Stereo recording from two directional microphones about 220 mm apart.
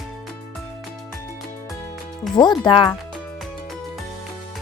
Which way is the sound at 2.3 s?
20° left (ahead or behind).